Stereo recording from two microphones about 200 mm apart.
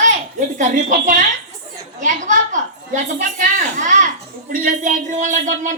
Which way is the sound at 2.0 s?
40° right (ahead or behind).